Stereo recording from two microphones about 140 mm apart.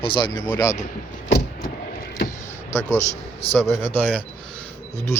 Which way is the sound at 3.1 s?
45° left (ahead or behind).